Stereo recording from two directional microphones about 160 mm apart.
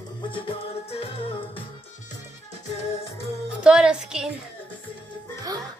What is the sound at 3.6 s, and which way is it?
Music, 5° right (ahead or behind).